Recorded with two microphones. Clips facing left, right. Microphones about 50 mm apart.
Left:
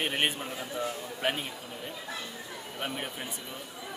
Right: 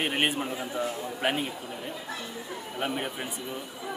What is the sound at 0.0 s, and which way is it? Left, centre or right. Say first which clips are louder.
Speech: right 3 dB; centre.